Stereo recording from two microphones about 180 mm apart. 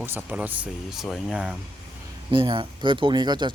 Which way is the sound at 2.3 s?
25° right (ahead or behind).